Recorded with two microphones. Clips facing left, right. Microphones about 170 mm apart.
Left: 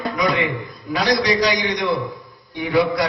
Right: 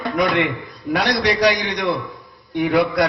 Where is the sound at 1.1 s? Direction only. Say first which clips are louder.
Even; 60° right (ahead or behind).